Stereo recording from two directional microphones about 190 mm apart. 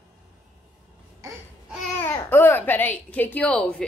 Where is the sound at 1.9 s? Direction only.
10° left (ahead or behind).